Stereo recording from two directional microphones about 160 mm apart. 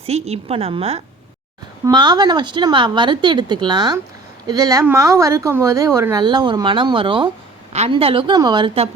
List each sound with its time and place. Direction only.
0.0 s a woman's voice: 40° right (ahead or behind)
1.8 s a woman's voice: 25° right (ahead or behind)